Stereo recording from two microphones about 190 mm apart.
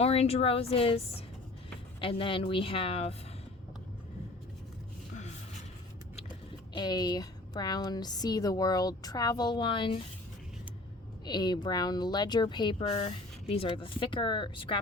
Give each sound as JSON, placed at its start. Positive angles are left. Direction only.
{"t": 0.0, "sound": "a woman's voice", "side_deg": 35}
{"t": 2.0, "sound": "speech", "side_deg": 30}
{"t": 6.7, "sound": "speech", "side_deg": 20}
{"t": 11.3, "sound": "speech", "side_deg": 20}